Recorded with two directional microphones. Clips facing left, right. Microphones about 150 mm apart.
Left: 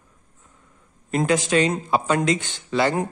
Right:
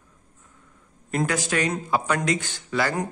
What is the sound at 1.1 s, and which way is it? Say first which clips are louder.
A man's voice: left 4 dB; 20° left (ahead or behind).